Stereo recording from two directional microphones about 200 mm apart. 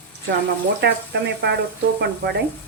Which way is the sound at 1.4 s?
60° right (ahead or behind).